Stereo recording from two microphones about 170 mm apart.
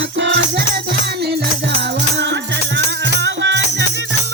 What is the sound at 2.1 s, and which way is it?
Music, 90° right.